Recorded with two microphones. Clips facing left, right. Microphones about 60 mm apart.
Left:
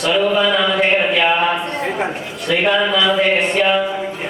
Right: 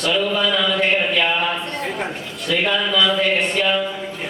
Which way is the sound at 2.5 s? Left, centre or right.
Centre.